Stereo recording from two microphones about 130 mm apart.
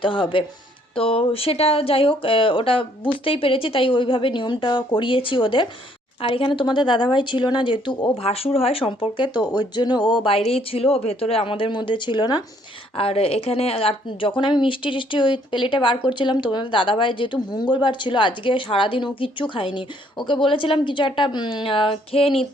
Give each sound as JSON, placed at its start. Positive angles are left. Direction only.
{"t": 0.0, "sound": "speech", "side_deg": 40}
{"t": 8.2, "sound": "speech", "side_deg": 50}
{"t": 13.0, "sound": "speech", "side_deg": 45}